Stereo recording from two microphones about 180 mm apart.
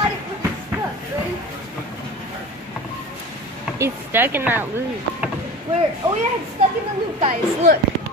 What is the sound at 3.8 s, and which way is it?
Speech, 10° right (ahead or behind).